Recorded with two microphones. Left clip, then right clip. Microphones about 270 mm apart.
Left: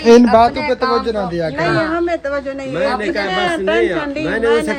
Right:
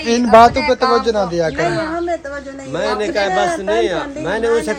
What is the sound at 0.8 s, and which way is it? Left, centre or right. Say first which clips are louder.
Speech: right 2 dB; centre.